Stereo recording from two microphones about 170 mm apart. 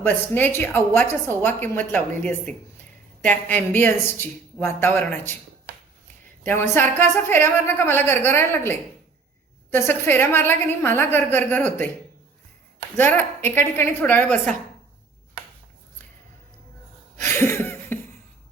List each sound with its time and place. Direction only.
0.0 s a woman's voice: 10° left (ahead or behind)
6.4 s a woman's voice: 10° left (ahead or behind)
13.0 s a woman's voice: 10° left (ahead or behind)
17.2 s a sound: 15° left (ahead or behind)